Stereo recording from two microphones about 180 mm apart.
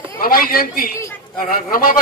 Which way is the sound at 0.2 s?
55° left (ahead or behind).